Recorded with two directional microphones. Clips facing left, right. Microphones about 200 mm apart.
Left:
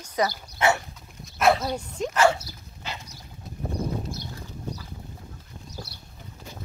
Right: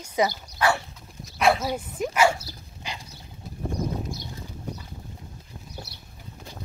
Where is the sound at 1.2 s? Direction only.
Centre (ahead or behind).